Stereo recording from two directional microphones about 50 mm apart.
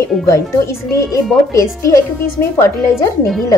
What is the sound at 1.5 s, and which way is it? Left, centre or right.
Speech, left.